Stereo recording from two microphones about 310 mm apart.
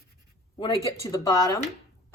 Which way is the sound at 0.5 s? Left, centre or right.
Centre.